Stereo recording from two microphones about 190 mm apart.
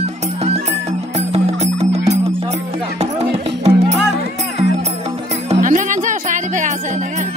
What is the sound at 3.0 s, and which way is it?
Music, 35° right (ahead or behind).